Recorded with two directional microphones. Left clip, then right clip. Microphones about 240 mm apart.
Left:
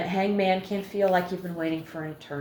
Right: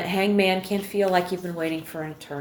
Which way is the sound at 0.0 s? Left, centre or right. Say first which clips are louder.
Right 3 dB; right.